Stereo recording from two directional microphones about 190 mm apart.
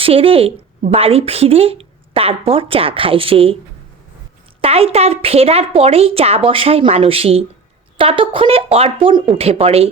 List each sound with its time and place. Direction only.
0.0 s speech: 30° right (ahead or behind)
4.6 s a woman's voice: 30° right (ahead or behind)